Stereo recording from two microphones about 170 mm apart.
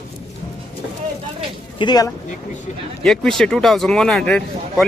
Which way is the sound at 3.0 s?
5° left (ahead or behind).